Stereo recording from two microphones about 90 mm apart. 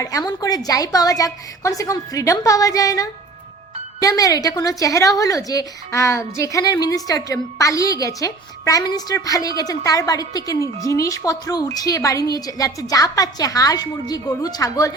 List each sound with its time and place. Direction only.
0.0 s speech: 40° left (ahead or behind)